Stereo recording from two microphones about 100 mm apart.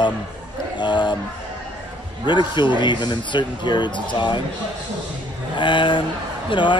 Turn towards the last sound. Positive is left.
turn(degrees=50)  # may be behind; listen again after turning